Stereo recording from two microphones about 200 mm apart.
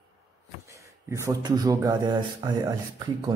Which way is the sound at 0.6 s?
15° right (ahead or behind).